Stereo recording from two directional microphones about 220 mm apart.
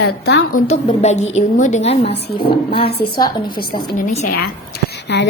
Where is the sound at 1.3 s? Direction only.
35° left (ahead or behind).